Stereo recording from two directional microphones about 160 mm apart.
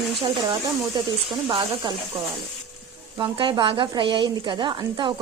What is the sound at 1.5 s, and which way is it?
Speech, 30° right (ahead or behind).